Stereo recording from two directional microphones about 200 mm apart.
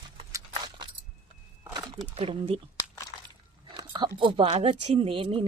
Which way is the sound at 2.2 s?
30° right (ahead or behind).